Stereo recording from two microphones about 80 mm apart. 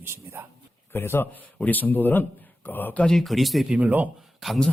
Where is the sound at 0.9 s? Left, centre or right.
Left.